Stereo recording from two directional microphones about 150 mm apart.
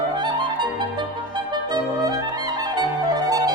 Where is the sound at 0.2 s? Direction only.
30° right (ahead or behind).